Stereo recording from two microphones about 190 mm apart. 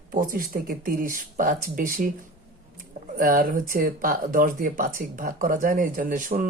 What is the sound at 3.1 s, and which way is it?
Speech, 50° right (ahead or behind).